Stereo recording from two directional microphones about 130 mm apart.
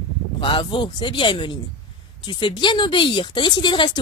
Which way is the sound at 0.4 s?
40° left (ahead or behind).